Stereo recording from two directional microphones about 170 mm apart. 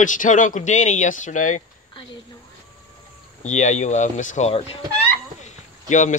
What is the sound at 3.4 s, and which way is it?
Speech, 45° left (ahead or behind).